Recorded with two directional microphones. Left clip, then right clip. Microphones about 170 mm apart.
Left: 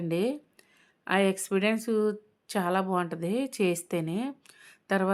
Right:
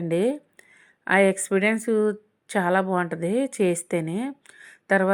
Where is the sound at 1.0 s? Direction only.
20° right (ahead or behind).